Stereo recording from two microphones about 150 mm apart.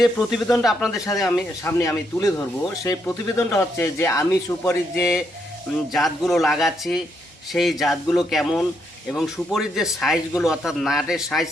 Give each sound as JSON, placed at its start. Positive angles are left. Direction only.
{"t": 0.0, "sound": "a man's voice", "side_deg": 0}
{"t": 1.6, "sound": "speech", "side_deg": 15}
{"t": 5.9, "sound": "a man's voice", "side_deg": 0}